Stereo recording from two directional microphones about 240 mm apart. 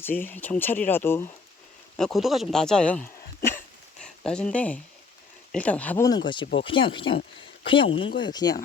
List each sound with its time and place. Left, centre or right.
0.0 s speech: centre